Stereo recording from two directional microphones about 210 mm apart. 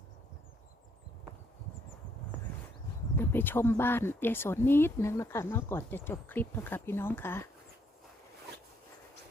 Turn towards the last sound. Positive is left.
turn(degrees=10)  # may be behind; listen again after turning